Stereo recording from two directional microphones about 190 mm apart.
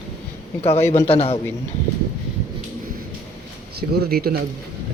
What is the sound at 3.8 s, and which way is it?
Speech, 55° right (ahead or behind).